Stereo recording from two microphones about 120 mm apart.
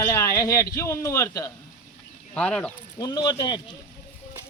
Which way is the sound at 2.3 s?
5° left (ahead or behind).